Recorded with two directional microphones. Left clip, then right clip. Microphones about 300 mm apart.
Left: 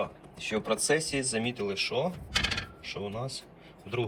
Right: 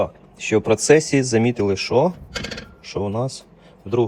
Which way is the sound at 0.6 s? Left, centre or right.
Right.